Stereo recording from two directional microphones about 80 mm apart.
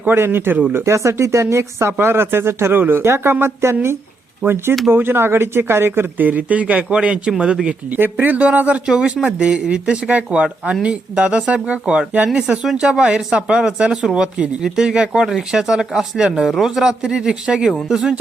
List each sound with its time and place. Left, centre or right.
0.0 s a man's voice: right; by 18.1 s centre